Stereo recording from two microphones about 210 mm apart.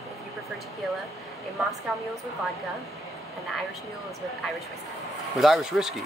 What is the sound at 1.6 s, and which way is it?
Speech, 5° right (ahead or behind).